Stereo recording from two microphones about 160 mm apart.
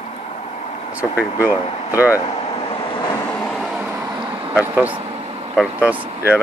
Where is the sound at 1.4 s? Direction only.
10° right (ahead or behind).